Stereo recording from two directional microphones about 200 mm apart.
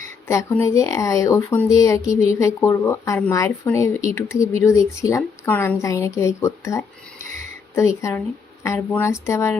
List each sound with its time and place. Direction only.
0.3 s speech: 15° left (ahead or behind)